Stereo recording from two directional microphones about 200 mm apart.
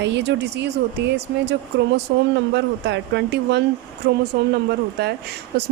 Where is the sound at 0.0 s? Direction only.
60° right (ahead or behind).